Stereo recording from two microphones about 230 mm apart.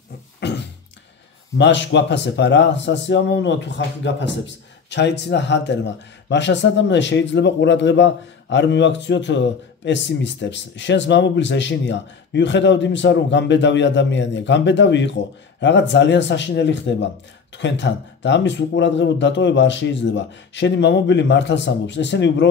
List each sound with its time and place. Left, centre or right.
0.4 s beatboxing: left
1.6 s a man's voice: left